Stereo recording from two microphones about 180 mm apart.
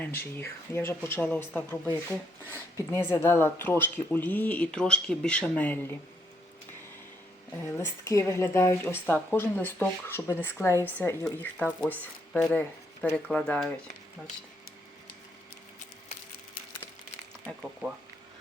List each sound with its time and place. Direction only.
0.2 s speech: 15° left (ahead or behind)
7.6 s speech: 15° left (ahead or behind)
17.6 s speech: centre (ahead or behind)